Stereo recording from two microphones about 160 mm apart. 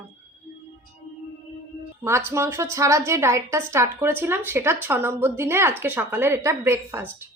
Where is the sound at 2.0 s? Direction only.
15° right (ahead or behind).